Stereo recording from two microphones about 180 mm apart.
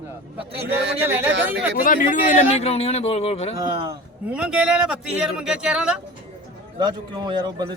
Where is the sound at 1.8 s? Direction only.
45° left (ahead or behind).